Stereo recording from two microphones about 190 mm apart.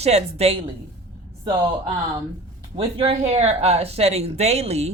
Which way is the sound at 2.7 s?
30° right (ahead or behind).